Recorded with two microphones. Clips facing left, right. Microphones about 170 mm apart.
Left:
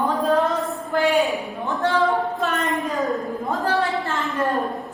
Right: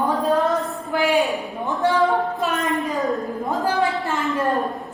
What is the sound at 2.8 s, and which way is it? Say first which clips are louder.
Speech: right 1 dB; centre (ahead or behind).